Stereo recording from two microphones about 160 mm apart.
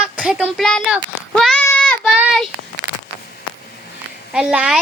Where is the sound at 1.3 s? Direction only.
5° left (ahead or behind).